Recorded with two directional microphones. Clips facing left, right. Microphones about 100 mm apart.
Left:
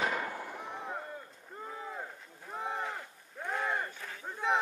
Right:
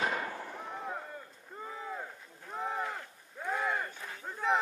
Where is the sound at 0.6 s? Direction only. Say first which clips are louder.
Even; centre (ahead or behind).